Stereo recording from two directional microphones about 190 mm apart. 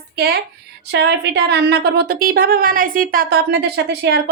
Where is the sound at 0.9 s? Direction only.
65° right (ahead or behind).